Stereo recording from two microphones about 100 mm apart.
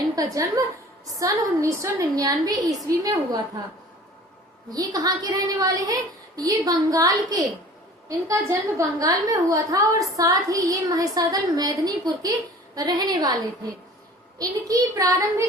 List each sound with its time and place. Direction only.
0.2 s a woman's voice: 40° right (ahead or behind)
4.7 s a woman's voice: 40° right (ahead or behind)
14.3 s a woman's voice: 35° right (ahead or behind)